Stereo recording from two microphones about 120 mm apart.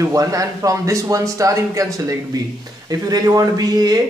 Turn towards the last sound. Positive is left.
turn(degrees=-35)  # may be behind; listen again after turning